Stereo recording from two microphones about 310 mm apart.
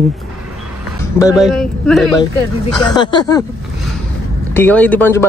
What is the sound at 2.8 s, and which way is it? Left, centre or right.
Speech, centre.